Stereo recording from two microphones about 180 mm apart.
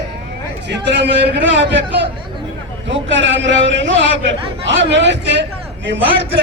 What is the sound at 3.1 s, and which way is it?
A man's voice, 90° right.